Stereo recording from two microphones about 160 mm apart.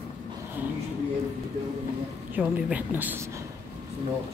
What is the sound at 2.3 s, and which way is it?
Speech, 10° right (ahead or behind).